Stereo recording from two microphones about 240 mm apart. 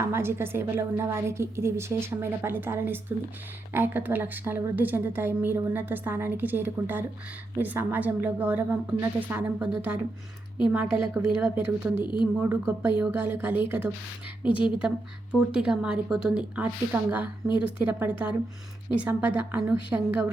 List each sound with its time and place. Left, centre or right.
0.0 s a woman's voice: centre
11.1 s speech: centre
11.9 s a woman's voice: centre
12.4 s a woman's voice: centre